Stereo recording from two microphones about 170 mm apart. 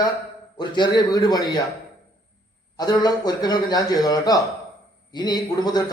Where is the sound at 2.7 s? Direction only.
25° left (ahead or behind).